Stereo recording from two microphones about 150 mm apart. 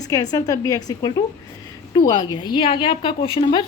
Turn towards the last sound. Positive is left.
turn(degrees=35)  # may be behind; listen again after turning